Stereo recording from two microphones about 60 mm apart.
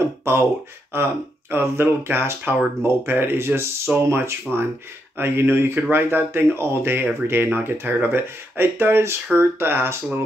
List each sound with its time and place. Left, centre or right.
0.2 s speech: right